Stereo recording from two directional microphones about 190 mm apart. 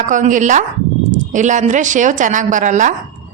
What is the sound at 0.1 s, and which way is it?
Speech, 40° right (ahead or behind).